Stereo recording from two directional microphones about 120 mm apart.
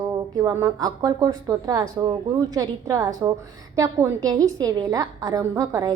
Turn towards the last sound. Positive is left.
turn(degrees=-30)  # may be behind; listen again after turning